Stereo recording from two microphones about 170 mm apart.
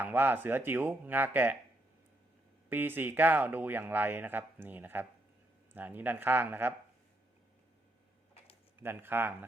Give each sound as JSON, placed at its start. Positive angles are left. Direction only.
{"t": 0.0, "sound": "speech", "side_deg": -10}
{"t": 2.6, "sound": "speech", "side_deg": -10}
{"t": 8.8, "sound": "speech", "side_deg": -15}